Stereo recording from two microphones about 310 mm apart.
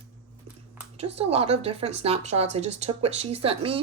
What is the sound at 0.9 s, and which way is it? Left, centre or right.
Speech, centre.